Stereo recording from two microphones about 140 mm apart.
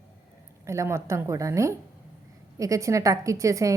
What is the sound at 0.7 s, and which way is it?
A woman's voice, 20° right (ahead or behind).